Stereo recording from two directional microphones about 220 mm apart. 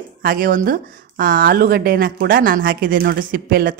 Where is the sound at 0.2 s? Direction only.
40° right (ahead or behind).